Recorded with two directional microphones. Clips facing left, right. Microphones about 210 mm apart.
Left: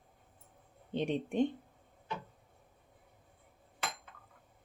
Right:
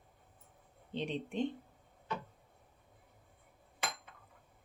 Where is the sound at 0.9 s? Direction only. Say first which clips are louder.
Left 5 dB; 50° left (ahead or behind).